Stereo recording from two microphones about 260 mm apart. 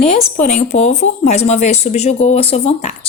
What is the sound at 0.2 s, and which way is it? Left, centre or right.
A woman's voice, left.